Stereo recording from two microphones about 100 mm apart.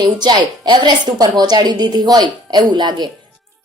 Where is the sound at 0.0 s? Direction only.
45° right (ahead or behind).